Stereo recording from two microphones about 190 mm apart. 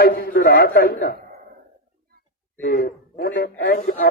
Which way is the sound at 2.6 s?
50° left (ahead or behind).